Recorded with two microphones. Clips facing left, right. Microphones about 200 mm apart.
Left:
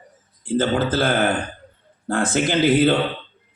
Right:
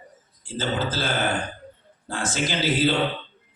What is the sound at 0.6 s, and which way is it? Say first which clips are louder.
A man's voice: left 7 dB; 55° left (ahead or behind).